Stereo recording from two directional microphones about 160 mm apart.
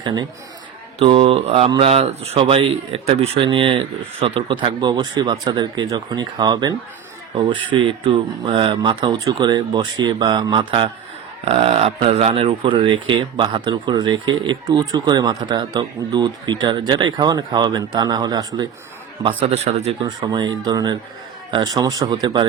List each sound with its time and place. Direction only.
0.0 s a man's voice: 25° right (ahead or behind)
0.9 s speech: 35° right (ahead or behind)
7.9 s speech: 35° right (ahead or behind)
19.4 s speech: 40° right (ahead or behind)
20.0 s speech: 25° right (ahead or behind)